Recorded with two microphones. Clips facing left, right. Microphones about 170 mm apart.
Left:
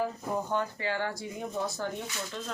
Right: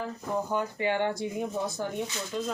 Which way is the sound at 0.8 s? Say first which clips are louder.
Right 5 dB; 20° right (ahead or behind).